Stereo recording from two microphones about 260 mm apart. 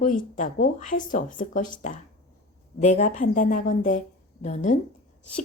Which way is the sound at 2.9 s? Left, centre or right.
Left.